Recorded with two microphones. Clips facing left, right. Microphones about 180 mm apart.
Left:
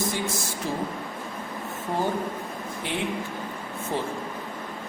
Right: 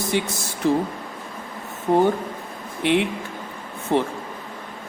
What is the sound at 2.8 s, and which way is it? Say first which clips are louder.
A man's voice: right 9 dB; 70° right (ahead or behind).